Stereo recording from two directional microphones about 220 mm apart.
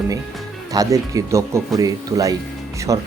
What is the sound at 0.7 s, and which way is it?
Speech, 15° right (ahead or behind).